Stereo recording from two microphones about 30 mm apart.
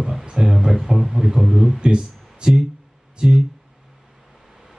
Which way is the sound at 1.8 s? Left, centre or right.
Right.